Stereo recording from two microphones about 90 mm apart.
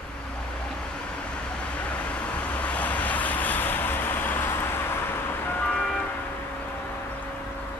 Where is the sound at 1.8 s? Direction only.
15° left (ahead or behind).